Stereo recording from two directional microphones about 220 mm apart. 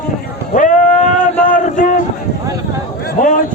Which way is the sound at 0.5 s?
35° left (ahead or behind).